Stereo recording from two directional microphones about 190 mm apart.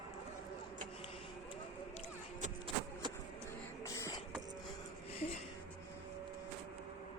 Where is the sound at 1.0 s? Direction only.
30° left (ahead or behind).